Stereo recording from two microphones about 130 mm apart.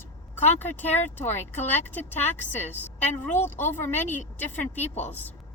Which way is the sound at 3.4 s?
15° left (ahead or behind).